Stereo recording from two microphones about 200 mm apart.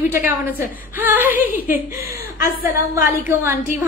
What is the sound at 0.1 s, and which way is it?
Speech, 10° right (ahead or behind).